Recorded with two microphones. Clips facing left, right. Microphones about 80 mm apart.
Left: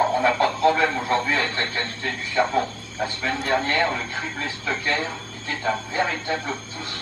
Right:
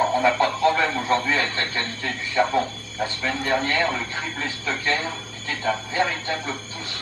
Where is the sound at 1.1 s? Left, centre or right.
Left.